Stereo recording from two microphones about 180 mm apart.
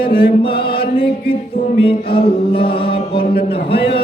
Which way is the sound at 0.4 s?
30° left (ahead or behind).